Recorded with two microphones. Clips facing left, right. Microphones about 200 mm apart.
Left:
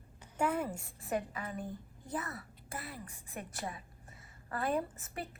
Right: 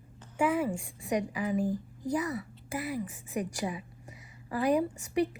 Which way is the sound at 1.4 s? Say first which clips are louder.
Right 12 dB; 90° right.